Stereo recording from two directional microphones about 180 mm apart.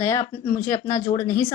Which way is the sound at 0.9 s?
35° left (ahead or behind).